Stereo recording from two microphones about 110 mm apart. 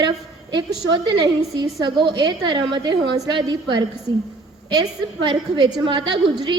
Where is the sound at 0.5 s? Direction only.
40° right (ahead or behind).